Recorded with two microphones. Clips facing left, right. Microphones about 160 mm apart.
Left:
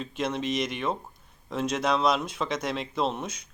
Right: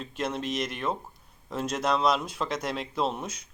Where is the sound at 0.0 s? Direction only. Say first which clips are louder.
Left 2 dB; centre (ahead or behind).